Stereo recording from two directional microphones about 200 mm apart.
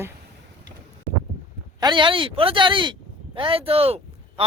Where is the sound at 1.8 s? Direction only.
25° right (ahead or behind).